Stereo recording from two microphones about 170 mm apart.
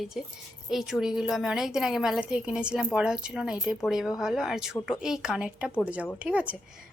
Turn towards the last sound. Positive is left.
turn(degrees=-5)  # may be behind; listen again after turning